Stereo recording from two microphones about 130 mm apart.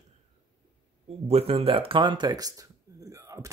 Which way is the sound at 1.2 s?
50° right (ahead or behind).